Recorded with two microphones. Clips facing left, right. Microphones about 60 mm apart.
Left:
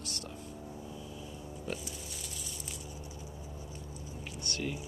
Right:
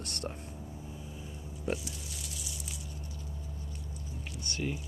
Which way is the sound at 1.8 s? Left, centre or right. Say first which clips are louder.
Even; centre.